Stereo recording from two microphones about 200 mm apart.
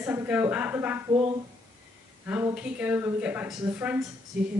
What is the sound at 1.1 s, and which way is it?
Speech, 25° right (ahead or behind).